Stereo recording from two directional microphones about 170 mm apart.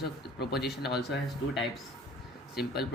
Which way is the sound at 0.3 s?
70° left (ahead or behind).